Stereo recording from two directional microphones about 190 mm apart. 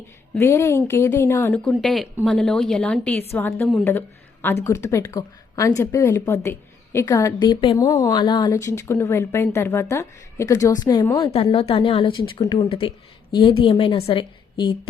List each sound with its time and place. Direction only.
0.3 s a woman's voice: 15° left (ahead or behind)
4.6 s a woman's voice: 15° left (ahead or behind)